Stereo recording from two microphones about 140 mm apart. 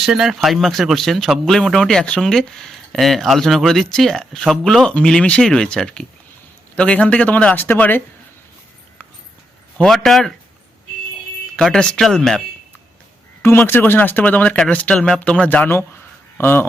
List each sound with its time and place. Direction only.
0.0 s speech: 5° right (ahead or behind); by 8.0 s 15° left (ahead or behind)
9.7 s speech: 5° left (ahead or behind)
11.5 s speech: 5° left (ahead or behind)
13.4 s speech: 15° left (ahead or behind)